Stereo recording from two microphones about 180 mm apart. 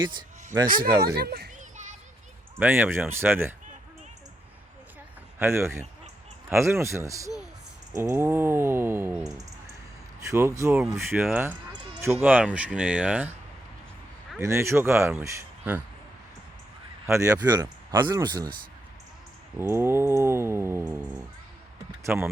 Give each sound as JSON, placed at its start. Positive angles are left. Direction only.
{"t": 0.0, "sound": "speech", "side_deg": -25}
{"t": 1.1, "sound": "a child's voice", "side_deg": -60}
{"t": 1.7, "sound": "children playing", "side_deg": -45}
{"t": 2.6, "sound": "speech", "side_deg": -10}
{"t": 5.4, "sound": "speech", "side_deg": -15}
{"t": 14.4, "sound": "speech", "side_deg": -15}
{"t": 17.1, "sound": "speech", "side_deg": -15}
{"t": 19.5, "sound": "speech", "side_deg": -15}
{"t": 22.0, "sound": "speech", "side_deg": -15}